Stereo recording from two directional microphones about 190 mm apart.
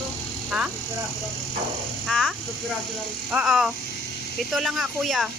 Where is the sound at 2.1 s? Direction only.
Centre (ahead or behind).